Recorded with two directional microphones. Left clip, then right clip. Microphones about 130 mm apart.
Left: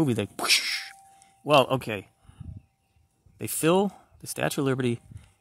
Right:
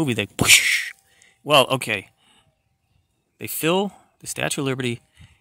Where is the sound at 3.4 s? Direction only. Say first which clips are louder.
Right 2 dB; centre (ahead or behind).